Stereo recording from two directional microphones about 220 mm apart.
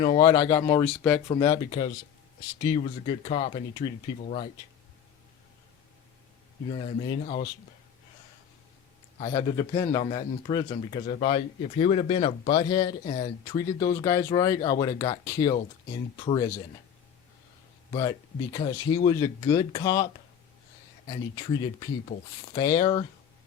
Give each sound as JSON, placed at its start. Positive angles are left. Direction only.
{"t": 0.0, "sound": "speech", "side_deg": 20}
{"t": 1.3, "sound": "speech", "side_deg": 15}
{"t": 6.7, "sound": "speech", "side_deg": 25}
{"t": 9.1, "sound": "speech", "side_deg": 25}
{"t": 18.5, "sound": "speech", "side_deg": 20}
{"t": 21.1, "sound": "speech", "side_deg": 20}